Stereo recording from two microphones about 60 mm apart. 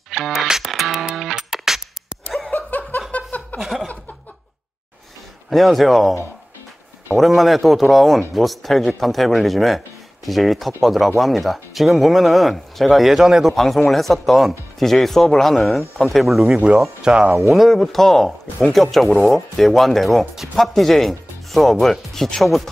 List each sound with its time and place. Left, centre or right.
0.1 s music: centre
2.5 s laughter: left
3.1 s a sound: left
5.5 s speech: centre
7.2 s speech: centre
13.6 s speech: centre
17.4 s speech: centre